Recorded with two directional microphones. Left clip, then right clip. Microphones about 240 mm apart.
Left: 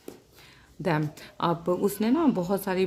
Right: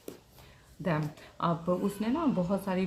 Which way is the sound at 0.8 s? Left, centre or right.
Left.